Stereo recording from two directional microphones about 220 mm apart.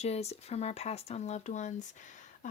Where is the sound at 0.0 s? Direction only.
30° left (ahead or behind).